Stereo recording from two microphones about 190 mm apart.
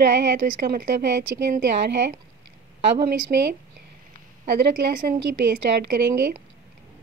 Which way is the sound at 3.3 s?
50° right (ahead or behind).